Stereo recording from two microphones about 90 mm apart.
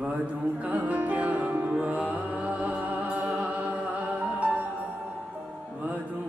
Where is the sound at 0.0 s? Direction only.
15° right (ahead or behind).